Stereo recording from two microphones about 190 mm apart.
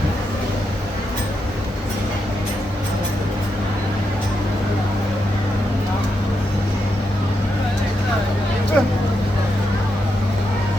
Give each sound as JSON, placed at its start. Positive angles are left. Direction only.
{"t": 8.8, "sound": "vehicle", "side_deg": 5}